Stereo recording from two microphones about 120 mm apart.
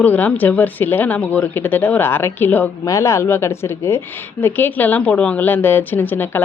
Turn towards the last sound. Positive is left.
turn(degrees=15)  # may be behind; listen again after turning